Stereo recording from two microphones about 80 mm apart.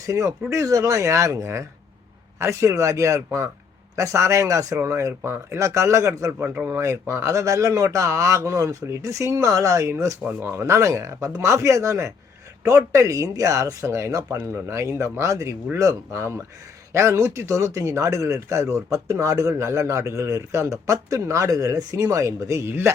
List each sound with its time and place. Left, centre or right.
0.0 s speech: right
6.4 s speech: right